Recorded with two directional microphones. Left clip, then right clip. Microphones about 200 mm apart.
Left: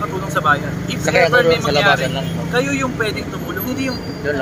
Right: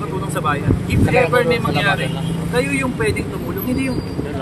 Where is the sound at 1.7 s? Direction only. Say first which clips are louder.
Left 4 dB; 60° left (ahead or behind).